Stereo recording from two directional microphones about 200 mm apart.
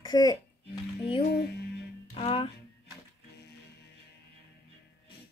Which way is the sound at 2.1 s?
25° left (ahead or behind).